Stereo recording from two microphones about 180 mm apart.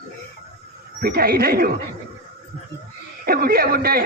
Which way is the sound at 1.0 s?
55° right (ahead or behind).